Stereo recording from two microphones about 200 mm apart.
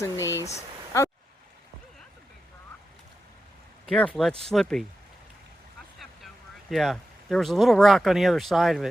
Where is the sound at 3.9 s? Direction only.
5° left (ahead or behind).